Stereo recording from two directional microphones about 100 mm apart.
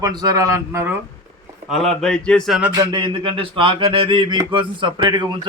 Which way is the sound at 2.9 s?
60° right (ahead or behind).